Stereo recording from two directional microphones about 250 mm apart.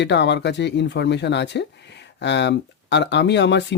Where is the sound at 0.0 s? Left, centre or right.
Left.